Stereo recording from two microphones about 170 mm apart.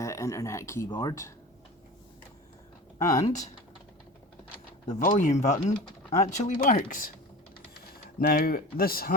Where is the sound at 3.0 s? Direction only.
20° left (ahead or behind).